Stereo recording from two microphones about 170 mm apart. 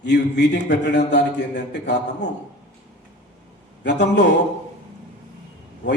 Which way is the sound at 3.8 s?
85° left.